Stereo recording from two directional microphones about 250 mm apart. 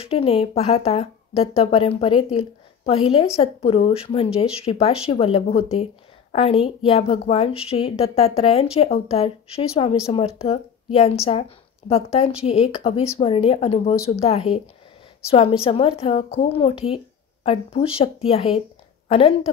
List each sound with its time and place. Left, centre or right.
0.0 s speech: left
13.9 s speech: centre
14.2 s speech: left